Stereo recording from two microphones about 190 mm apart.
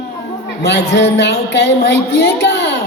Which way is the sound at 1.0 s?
65° left (ahead or behind).